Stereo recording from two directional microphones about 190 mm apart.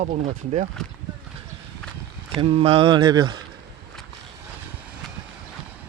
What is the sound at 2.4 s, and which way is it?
Mantra, 30° right (ahead or behind).